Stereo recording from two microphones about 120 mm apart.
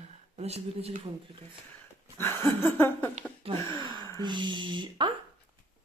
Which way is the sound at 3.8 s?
40° right (ahead or behind).